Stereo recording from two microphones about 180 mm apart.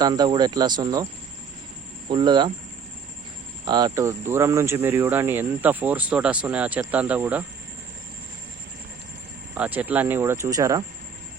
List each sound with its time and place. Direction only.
0.0 s speech: 25° right (ahead or behind)
2.0 s speech: 25° right (ahead or behind)
3.7 s speech: 20° right (ahead or behind)
9.6 s speech: 10° right (ahead or behind)